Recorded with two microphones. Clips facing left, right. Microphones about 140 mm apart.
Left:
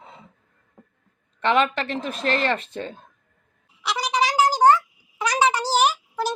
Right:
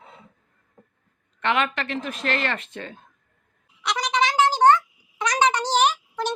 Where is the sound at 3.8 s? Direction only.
5° left (ahead or behind).